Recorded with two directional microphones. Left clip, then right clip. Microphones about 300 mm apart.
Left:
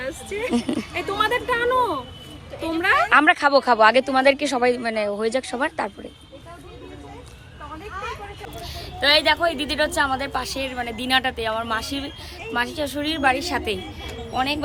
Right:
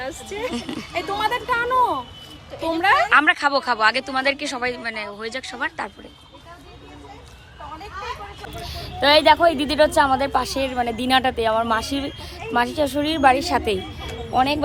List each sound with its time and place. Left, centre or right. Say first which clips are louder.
0.0 s speech: even; right
1.5 s speech: right 1 dB; centre
2.6 s a woman's voice: right 2 dB; right
3.1 s a woman's voice: left 1 dB; centre
8.6 s a woman's voice: right 2 dB; centre